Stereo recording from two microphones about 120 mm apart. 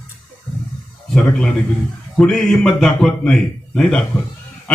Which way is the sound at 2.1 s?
5° left (ahead or behind).